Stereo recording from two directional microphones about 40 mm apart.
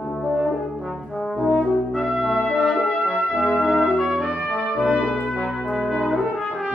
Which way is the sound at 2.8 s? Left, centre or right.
Left.